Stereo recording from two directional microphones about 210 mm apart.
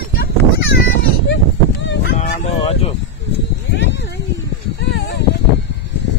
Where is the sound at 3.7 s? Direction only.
55° left (ahead or behind).